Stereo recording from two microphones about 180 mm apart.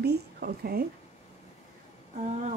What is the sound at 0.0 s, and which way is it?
Speech, 60° right (ahead or behind).